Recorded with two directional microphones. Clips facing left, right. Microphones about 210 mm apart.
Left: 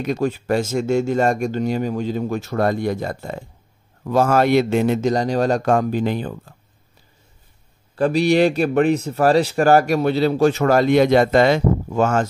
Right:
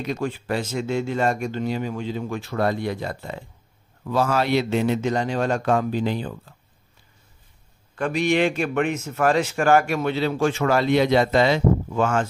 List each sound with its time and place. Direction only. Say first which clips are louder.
0.0 s speech: left 5 dB; 45° left (ahead or behind)
7.9 s speech: left 5 dB; 35° left (ahead or behind)